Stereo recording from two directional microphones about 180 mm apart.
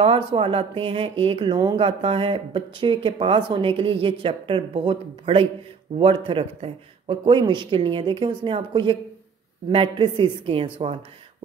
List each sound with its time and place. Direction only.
0.0 s a woman's voice: 30° right (ahead or behind)